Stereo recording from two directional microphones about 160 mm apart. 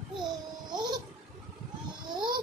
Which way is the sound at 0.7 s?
25° right (ahead or behind).